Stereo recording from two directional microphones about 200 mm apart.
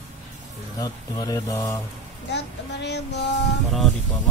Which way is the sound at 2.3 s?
60° left (ahead or behind).